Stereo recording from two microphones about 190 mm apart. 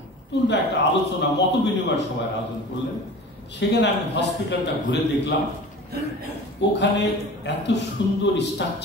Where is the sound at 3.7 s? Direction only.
65° left (ahead or behind).